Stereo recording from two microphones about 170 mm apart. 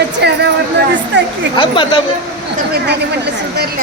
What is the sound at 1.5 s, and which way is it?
Speech, 30° left (ahead or behind).